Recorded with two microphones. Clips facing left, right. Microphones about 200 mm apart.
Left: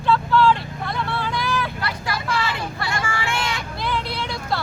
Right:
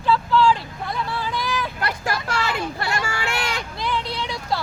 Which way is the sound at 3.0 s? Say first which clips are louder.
Left 1 dB; 40° right (ahead or behind).